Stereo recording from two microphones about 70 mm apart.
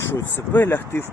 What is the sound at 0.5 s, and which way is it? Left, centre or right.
Speech, left.